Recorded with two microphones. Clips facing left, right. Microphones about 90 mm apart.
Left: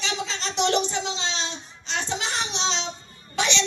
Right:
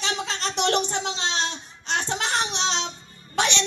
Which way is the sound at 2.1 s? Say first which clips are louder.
Right 2 dB; 55° right (ahead or behind).